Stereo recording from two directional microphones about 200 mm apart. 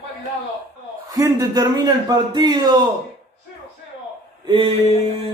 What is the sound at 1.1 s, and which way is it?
A man's voice, 20° right (ahead or behind).